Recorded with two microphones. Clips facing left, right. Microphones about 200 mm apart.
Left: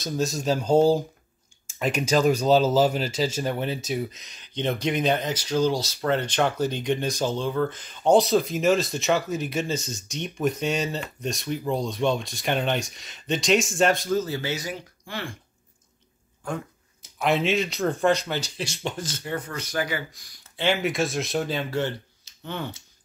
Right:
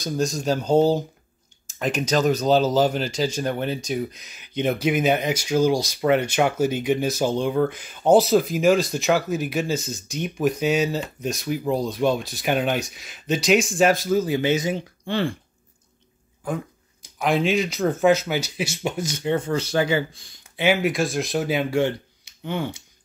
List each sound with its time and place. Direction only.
0.0 s speech: 5° left (ahead or behind); by 15.3 s 30° right (ahead or behind)
16.4 s speech: centre (ahead or behind)
19.3 s speech: 30° right (ahead or behind)
20.4 s speech: 10° right (ahead or behind)